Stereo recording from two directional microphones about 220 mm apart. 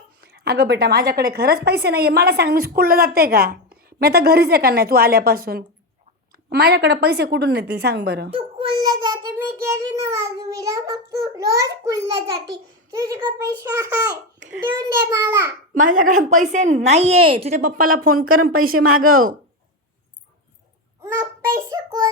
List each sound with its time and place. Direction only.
0.2 s a woman's voice: 45° right (ahead or behind)
8.3 s a child's voice: 25° right (ahead or behind)
15.7 s a woman's voice: 40° right (ahead or behind)
18.8 s a woman's voice: 75° right (ahead or behind)
21.0 s child singing: 15° right (ahead or behind)